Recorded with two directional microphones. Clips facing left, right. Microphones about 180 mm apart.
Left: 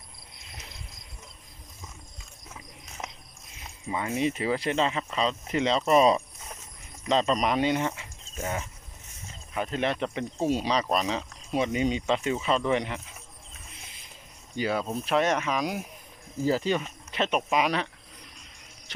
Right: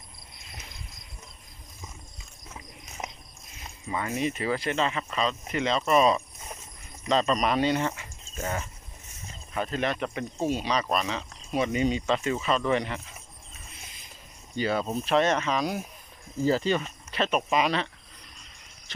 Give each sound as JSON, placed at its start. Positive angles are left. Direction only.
{"t": 3.0, "sound": "cricket", "side_deg": -15}
{"t": 3.8, "sound": "speech", "side_deg": 20}
{"t": 9.8, "sound": "speech", "side_deg": 25}
{"t": 14.5, "sound": "speech", "side_deg": 5}